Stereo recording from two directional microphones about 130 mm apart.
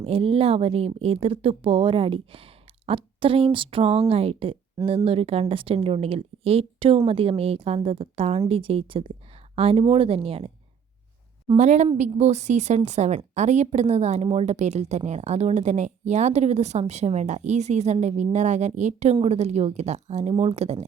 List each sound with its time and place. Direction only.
0.0 s speech: 45° right (ahead or behind)
11.5 s speech: 60° right (ahead or behind)